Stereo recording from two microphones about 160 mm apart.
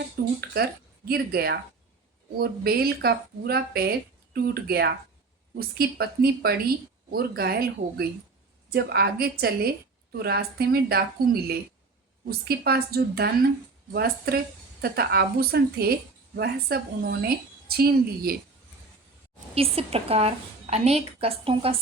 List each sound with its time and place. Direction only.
0.2 s speech: 70° right (ahead or behind)
12.2 s speech: 75° right (ahead or behind)
19.5 s a woman's voice: 35° right (ahead or behind)